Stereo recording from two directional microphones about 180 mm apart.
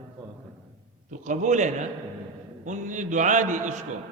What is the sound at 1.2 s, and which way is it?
A man's voice, 45° right (ahead or behind).